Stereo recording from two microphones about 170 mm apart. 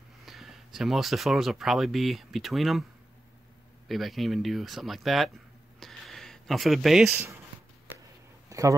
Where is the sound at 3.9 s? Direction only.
Centre (ahead or behind).